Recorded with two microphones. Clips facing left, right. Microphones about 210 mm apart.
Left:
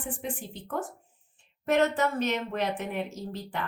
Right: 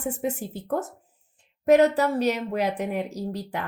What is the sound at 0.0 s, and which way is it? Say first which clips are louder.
Speech: right 7 dB; 40° right (ahead or behind).